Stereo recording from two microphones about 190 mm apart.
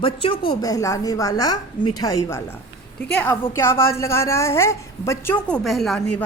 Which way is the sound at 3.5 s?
15° left (ahead or behind).